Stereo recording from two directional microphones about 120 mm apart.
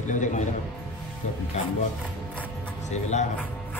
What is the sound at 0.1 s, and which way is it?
Speech, 90° left.